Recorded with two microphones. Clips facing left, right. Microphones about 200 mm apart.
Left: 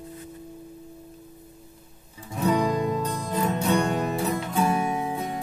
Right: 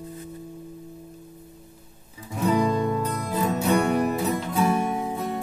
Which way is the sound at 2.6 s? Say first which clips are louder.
Right 1 dB; 15° left (ahead or behind).